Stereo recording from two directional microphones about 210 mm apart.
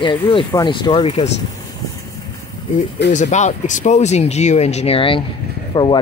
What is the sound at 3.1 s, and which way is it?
Speech, 35° left (ahead or behind).